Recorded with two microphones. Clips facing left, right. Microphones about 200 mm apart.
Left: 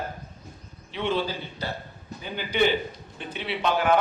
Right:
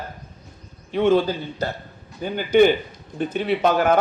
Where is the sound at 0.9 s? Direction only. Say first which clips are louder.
Right 9 dB; 45° right (ahead or behind).